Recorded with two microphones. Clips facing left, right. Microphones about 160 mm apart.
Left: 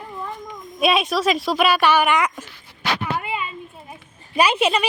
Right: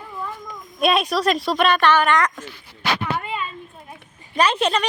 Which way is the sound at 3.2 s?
10° left (ahead or behind).